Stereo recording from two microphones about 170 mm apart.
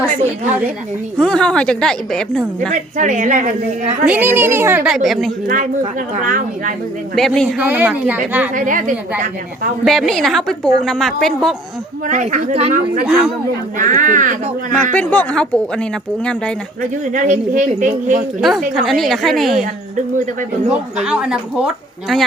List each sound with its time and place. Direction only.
1.2 s a woman's voice: 5° left (ahead or behind)
3.0 s a woman's voice: 50° right (ahead or behind)
4.0 s speech: 10° right (ahead or behind)
5.5 s a woman's voice: 50° right (ahead or behind)
7.2 s a woman's voice: 5° left (ahead or behind)
7.6 s speech: 10° right (ahead or behind)
8.5 s a woman's voice: 50° right (ahead or behind)
9.8 s a woman's voice: centre (ahead or behind)
12.0 s a woman's voice: 45° right (ahead or behind)
14.9 s speech: 10° left (ahead or behind)
17.1 s a woman's voice: 50° right (ahead or behind)
18.7 s a woman's voice: centre (ahead or behind)
20.7 s a woman's voice: 5° right (ahead or behind)